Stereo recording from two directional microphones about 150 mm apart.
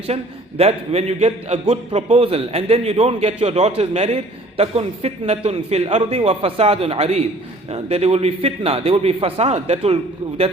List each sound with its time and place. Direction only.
0.1 s a man's voice: 40° right (ahead or behind)